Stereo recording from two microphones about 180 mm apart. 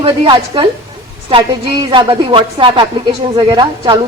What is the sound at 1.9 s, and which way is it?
A woman's voice, 25° right (ahead or behind).